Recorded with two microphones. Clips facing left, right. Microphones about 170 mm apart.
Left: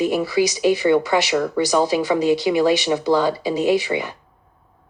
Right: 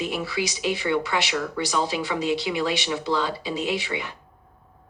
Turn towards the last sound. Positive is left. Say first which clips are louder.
# left 9 dB
turn(degrees=40)  # may be behind; listen again after turning